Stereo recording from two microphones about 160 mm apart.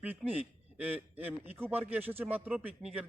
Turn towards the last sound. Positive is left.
turn(degrees=-5)  # may be behind; listen again after turning